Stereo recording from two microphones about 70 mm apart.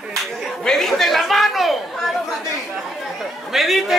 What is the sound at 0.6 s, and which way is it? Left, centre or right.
Chatter, centre.